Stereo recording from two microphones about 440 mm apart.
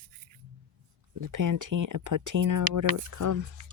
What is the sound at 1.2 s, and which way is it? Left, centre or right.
Speech, right.